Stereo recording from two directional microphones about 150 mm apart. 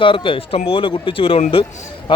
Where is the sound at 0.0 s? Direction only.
35° left (ahead or behind).